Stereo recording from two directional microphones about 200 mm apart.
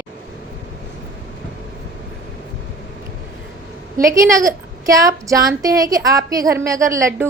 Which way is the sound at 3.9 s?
15° right (ahead or behind).